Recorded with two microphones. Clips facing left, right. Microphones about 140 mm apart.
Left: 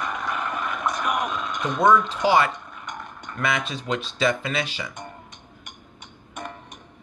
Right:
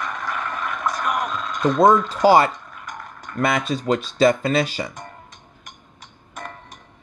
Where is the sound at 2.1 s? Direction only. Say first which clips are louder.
Right 5 dB; 40° right (ahead or behind).